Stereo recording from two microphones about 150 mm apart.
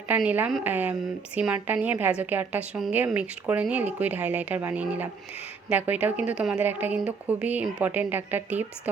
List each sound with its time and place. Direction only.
0.1 s a woman's voice: 10° right (ahead or behind)